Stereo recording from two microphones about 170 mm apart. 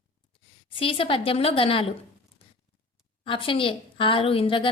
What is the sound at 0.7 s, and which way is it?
A woman's voice, 30° left (ahead or behind).